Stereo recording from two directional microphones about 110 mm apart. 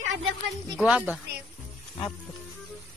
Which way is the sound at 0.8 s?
10° right (ahead or behind).